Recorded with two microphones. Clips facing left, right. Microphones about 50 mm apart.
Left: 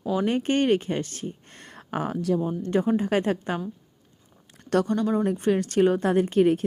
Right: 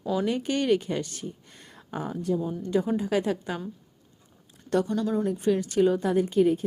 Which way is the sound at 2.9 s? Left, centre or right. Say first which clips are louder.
Left 2 dB; left.